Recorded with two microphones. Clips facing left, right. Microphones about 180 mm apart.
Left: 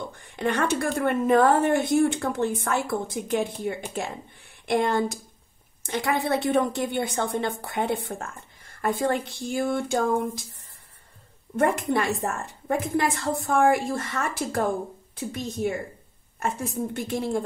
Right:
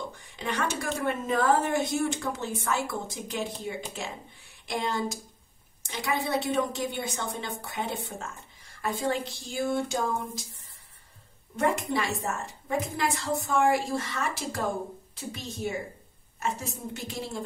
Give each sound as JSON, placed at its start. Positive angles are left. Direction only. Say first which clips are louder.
{"t": 0.4, "sound": "a woman's voice", "louder": "left 7 dB", "side_deg": 55}
{"t": 11.5, "sound": "a woman's voice", "louder": "left 4 dB", "side_deg": 55}